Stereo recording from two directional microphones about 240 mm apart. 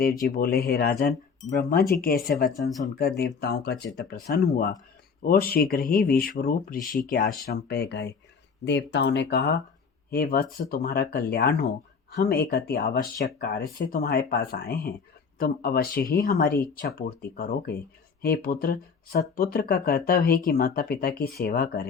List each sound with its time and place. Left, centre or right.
0.0 s speech: left